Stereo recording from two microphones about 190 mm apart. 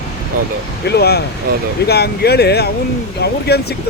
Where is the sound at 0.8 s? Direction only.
60° left (ahead or behind).